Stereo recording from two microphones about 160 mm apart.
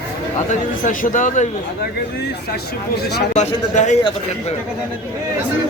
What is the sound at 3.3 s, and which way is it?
Speech, 50° left (ahead or behind).